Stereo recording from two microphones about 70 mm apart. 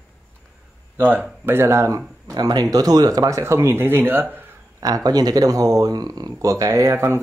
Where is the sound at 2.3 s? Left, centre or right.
Right.